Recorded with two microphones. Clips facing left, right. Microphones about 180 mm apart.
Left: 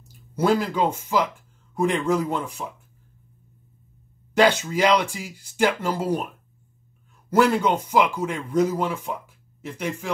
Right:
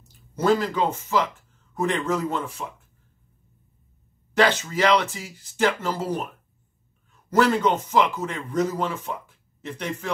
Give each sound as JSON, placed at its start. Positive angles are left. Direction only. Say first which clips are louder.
{"t": 0.4, "sound": "speech", "louder": "even", "side_deg": 10}
{"t": 4.3, "sound": "speech", "louder": "left 2 dB", "side_deg": 10}
{"t": 7.2, "sound": "speech", "louder": "left 1 dB", "side_deg": 10}